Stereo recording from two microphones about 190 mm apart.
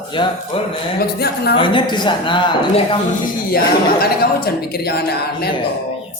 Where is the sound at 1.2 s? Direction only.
55° left (ahead or behind).